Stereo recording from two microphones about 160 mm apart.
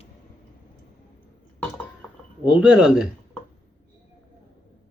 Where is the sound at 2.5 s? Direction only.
5° right (ahead or behind).